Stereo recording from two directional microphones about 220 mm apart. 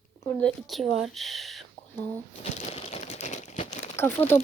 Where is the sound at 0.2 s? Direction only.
10° left (ahead or behind).